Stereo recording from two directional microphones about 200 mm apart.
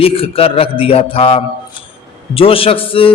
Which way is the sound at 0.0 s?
30° left (ahead or behind).